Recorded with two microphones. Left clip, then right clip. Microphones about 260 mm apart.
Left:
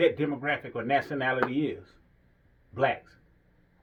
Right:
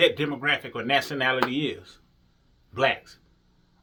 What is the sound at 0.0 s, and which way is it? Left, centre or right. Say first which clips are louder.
A man's voice: right 3 dB; centre.